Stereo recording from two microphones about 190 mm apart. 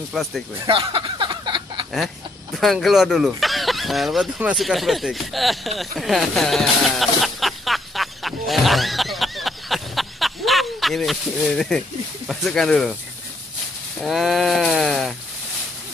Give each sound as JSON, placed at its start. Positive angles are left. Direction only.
{"t": 0.1, "sound": "sheep", "side_deg": 0}
{"t": 0.7, "sound": "a sound", "side_deg": -25}
{"t": 2.5, "sound": "speech", "side_deg": 0}
{"t": 12.3, "sound": "sheep", "side_deg": 0}
{"t": 13.9, "sound": "sheep", "side_deg": 0}